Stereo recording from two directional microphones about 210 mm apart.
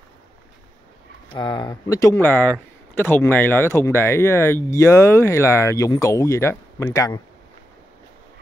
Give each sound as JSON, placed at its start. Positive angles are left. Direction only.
{"t": 1.3, "sound": "speech", "side_deg": 20}